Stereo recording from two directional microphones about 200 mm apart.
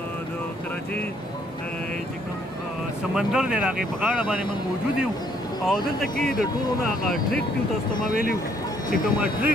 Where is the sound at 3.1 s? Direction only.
Centre (ahead or behind).